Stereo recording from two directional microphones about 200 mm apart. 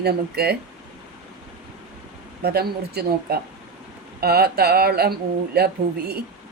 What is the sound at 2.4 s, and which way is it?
Speech, 50° right (ahead or behind).